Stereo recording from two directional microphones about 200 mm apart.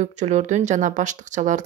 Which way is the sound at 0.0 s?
35° right (ahead or behind).